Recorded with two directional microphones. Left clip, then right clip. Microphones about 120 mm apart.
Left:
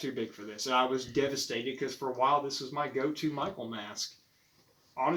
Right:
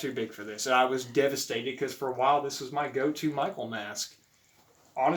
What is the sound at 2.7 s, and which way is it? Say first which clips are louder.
Speech: right 4 dB; 25° right (ahead or behind).